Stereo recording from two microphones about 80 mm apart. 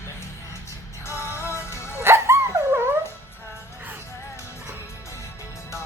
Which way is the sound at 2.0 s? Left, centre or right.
Right.